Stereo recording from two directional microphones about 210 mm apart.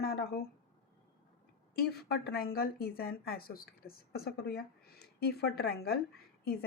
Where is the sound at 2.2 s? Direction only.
45° left (ahead or behind).